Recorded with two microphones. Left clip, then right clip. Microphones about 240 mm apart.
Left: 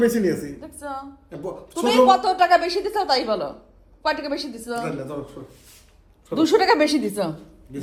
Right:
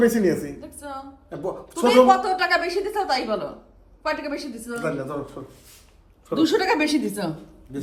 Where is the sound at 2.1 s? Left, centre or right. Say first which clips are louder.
Left 3 dB; left.